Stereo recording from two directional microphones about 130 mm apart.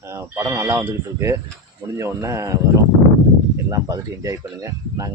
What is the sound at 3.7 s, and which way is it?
Speech, 25° right (ahead or behind).